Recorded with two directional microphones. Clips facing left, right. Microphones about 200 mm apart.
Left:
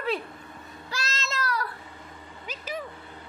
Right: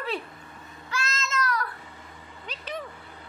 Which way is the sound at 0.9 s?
35° left (ahead or behind).